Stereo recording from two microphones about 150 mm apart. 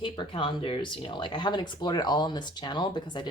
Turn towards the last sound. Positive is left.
turn(degrees=30)  # may be behind; listen again after turning